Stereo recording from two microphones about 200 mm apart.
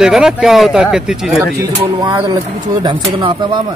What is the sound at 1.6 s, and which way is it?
Speech, 20° right (ahead or behind).